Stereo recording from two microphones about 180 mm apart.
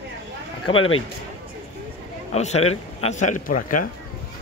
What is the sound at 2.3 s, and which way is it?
A man's voice, 35° left (ahead or behind).